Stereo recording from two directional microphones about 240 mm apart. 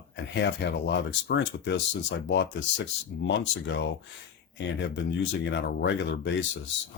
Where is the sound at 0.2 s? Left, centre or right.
Left.